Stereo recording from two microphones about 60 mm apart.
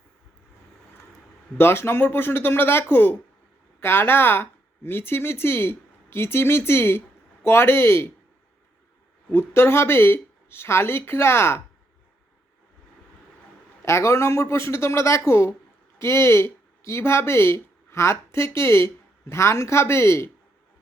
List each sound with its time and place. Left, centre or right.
1.5 s a woman's voice: left
9.3 s speech: left
13.8 s speech: left